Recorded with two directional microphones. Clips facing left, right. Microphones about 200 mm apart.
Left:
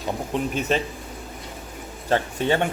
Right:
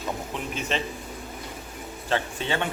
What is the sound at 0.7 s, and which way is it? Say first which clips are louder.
Speech: left 5 dB; 45° left (ahead or behind).